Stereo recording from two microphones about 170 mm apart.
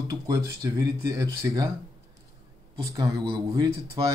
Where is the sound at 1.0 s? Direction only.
20° right (ahead or behind).